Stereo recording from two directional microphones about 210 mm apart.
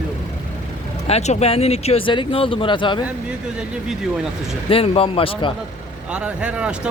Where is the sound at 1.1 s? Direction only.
30° left (ahead or behind).